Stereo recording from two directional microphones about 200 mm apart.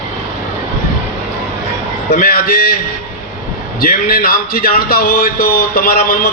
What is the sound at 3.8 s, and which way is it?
Speech, 50° left (ahead or behind).